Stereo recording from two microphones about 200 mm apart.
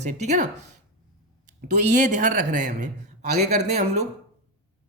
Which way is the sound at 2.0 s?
40° right (ahead or behind).